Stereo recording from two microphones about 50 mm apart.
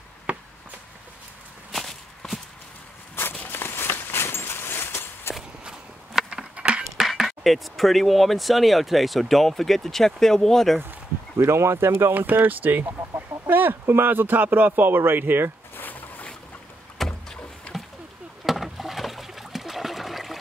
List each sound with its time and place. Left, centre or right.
0.3 s a sound: right
1.7 s walk: centre
3.2 s walk: left
5.6 s walk: centre
6.5 s cutlery: right
7.0 s speech: centre
11.3 s speech: right
12.1 s speech: right
15.7 s a sound: left
17.0 s rowboat: centre
17.7 s a sound: left
18.4 s water: centre